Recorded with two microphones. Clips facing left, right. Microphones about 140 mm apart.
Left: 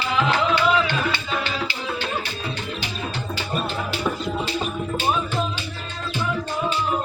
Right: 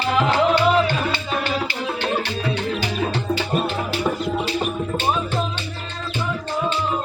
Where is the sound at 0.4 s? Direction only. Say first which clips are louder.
Right 3 dB; 40° right (ahead or behind).